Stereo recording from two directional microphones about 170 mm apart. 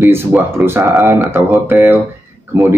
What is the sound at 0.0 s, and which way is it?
Speech, 15° right (ahead or behind).